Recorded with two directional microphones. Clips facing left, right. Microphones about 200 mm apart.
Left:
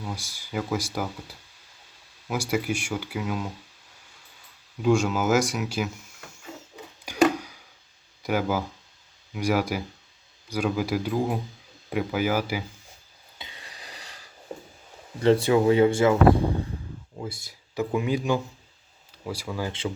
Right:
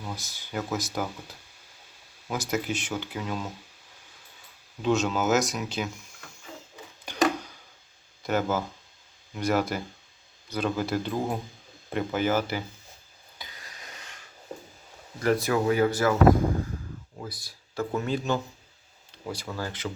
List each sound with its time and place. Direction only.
0.0 s speech: 10° left (ahead or behind)
4.8 s speech: 10° left (ahead or behind)
7.0 s a sound: 10° left (ahead or behind)
8.2 s speech: 10° left (ahead or behind)
13.4 s a sound: 30° left (ahead or behind)
15.2 s speech: 25° left (ahead or behind)
17.7 s speech: 10° left (ahead or behind)